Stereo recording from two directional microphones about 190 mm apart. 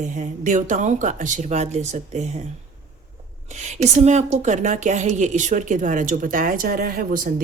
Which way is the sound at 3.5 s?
35° right (ahead or behind).